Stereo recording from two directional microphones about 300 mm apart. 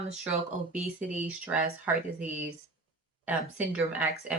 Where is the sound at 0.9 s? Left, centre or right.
Centre.